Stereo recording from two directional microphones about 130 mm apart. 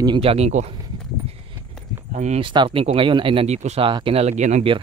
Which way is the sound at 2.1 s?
60° right (ahead or behind).